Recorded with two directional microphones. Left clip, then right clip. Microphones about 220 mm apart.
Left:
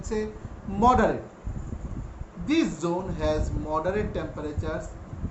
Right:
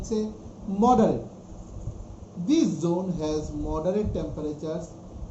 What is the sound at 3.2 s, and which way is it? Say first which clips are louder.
A woman's voice: left 2 dB; 10° left (ahead or behind).